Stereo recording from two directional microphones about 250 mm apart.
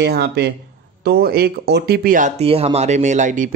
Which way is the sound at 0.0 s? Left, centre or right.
Right.